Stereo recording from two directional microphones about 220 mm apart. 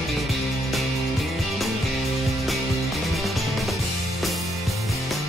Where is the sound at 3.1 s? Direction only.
Centre (ahead or behind).